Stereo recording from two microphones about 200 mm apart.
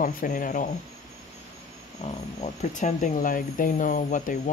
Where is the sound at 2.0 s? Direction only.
35° left (ahead or behind).